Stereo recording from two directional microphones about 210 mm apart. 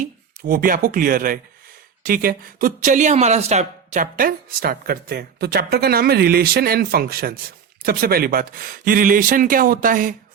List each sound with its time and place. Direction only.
0.4 s speech: 40° right (ahead or behind)